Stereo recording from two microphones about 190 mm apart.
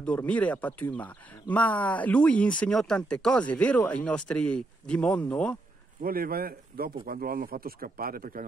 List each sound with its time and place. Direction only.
0.0 s speech: 5° left (ahead or behind)
6.0 s speech: 50° right (ahead or behind)